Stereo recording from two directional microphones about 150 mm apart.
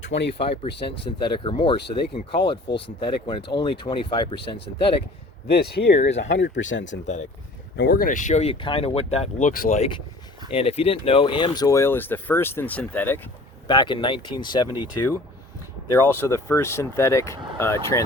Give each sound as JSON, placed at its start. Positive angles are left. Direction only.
{"t": 0.1, "sound": "speech", "side_deg": 45}
{"t": 5.5, "sound": "speech", "side_deg": 90}
{"t": 6.5, "sound": "speech", "side_deg": 55}
{"t": 7.8, "sound": "speech", "side_deg": 85}
{"t": 13.7, "sound": "speech", "side_deg": 30}
{"t": 15.9, "sound": "speech", "side_deg": 20}